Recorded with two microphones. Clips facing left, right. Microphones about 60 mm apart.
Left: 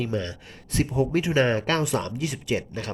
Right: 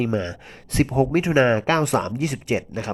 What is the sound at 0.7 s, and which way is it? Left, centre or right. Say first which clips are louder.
Speech: right 5 dB; right.